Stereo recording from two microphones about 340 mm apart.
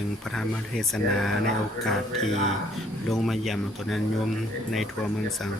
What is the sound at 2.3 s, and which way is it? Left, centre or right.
Speech, centre.